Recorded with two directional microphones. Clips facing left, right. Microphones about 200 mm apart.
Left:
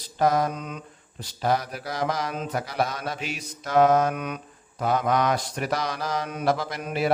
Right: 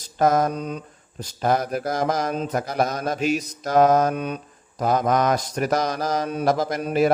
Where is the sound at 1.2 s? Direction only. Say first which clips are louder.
Right 3 dB; 50° right (ahead or behind).